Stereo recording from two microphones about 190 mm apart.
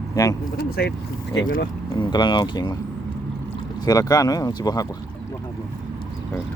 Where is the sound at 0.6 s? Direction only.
55° left (ahead or behind).